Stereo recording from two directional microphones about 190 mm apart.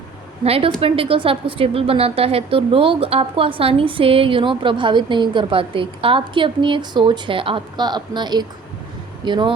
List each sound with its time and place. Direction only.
0.4 s a woman's voice: 30° right (ahead or behind)